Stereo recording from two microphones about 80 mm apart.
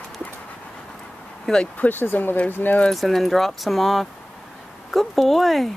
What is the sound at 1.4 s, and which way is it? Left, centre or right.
Speech, centre.